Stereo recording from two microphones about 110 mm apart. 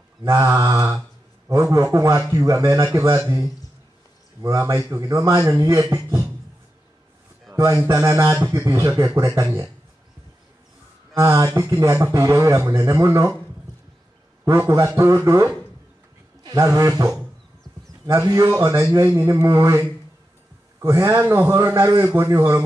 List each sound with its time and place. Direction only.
0.2 s a man's voice: 30° right (ahead or behind)
7.5 s a man's voice: 25° right (ahead or behind)
11.1 s a man's voice: 30° right (ahead or behind)
14.4 s a man's voice: 25° right (ahead or behind)
16.5 s a man's voice: 30° right (ahead or behind)